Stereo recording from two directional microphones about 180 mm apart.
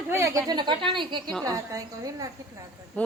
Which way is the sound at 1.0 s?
25° right (ahead or behind).